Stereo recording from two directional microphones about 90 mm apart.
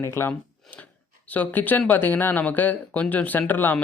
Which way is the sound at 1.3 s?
20° left (ahead or behind).